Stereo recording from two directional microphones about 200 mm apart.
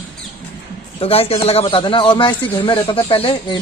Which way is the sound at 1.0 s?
30° left (ahead or behind).